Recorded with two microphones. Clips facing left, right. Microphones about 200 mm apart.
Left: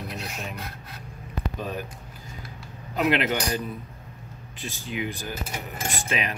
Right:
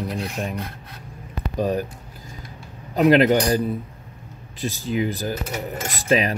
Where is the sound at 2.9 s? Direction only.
35° right (ahead or behind).